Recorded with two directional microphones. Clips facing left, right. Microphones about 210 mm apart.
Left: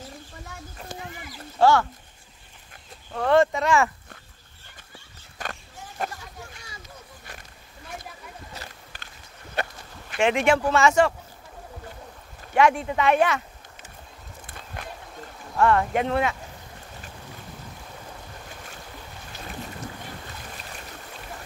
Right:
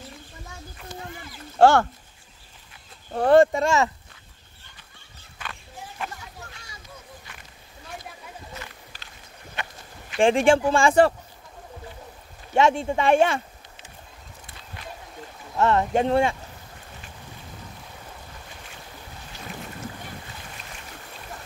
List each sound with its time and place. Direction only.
1.6 s speech: 55° right (ahead or behind)
3.1 s speech: 30° right (ahead or behind)
5.4 s a sound: 45° left (ahead or behind)
10.1 s speech: 30° right (ahead or behind)
12.5 s speech: 25° right (ahead or behind)
14.4 s a sound: 50° left (ahead or behind)
15.5 s speech: 20° right (ahead or behind)